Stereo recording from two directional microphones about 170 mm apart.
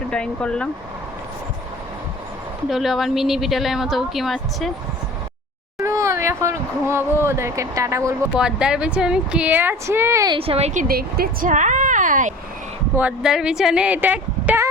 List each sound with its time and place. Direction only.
0.1 s speech: 5° left (ahead or behind)
2.6 s speech: centre (ahead or behind)
5.8 s speech: 15° right (ahead or behind)
8.4 s speech: 5° right (ahead or behind)
10.3 s speech: 35° right (ahead or behind)
13.0 s speech: 5° right (ahead or behind)